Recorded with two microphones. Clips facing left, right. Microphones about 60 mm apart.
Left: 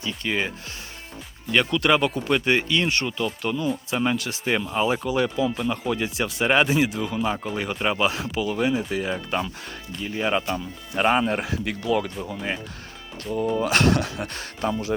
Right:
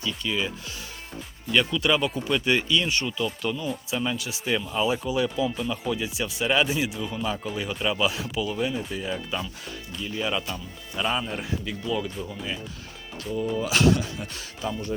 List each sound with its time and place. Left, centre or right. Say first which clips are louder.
0.0 s speech: left 2 dB; left
1.7 s speech: left 3 dB; left
3.6 s speech: left 4 dB; left
7.2 s speech: left 3 dB; left
8.7 s speech: left 6 dB; left
9.1 s speech: left 4 dB; left
11.0 s speech: left 7 dB; left
12.3 s speech: left 4 dB; left
13.6 s speech: even; left